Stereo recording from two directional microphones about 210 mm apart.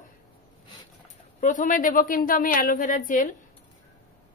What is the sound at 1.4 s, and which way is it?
Speech, 40° left (ahead or behind).